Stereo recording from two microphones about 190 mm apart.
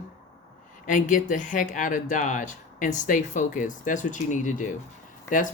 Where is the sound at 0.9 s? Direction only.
40° left (ahead or behind).